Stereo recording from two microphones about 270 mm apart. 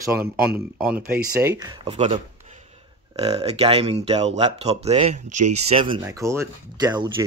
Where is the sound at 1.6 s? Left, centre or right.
Centre.